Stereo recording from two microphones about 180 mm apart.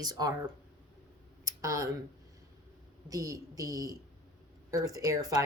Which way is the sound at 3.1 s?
20° right (ahead or behind).